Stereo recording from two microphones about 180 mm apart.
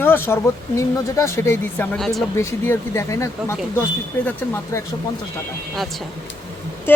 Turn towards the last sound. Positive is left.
turn(degrees=10)  # may be behind; listen again after turning